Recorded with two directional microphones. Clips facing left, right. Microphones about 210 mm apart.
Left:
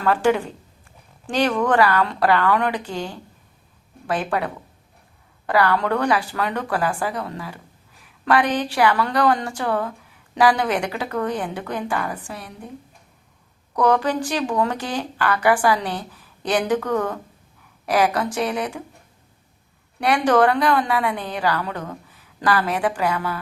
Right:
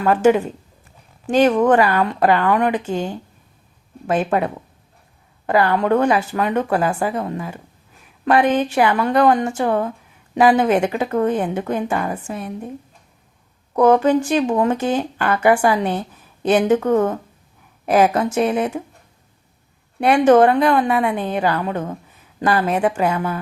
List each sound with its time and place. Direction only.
0.0 s speech: 20° right (ahead or behind)
13.7 s speech: 25° right (ahead or behind)
20.0 s speech: 25° right (ahead or behind)